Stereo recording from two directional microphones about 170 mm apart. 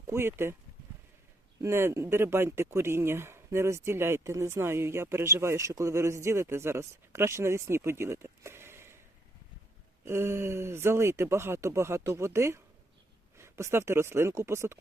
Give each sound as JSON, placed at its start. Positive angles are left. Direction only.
{"t": 0.1, "sound": "speech", "side_deg": -15}
{"t": 1.6, "sound": "speech", "side_deg": -15}
{"t": 10.0, "sound": "speech", "side_deg": -15}